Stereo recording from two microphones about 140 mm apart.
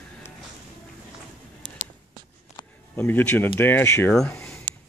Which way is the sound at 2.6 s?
30° left (ahead or behind).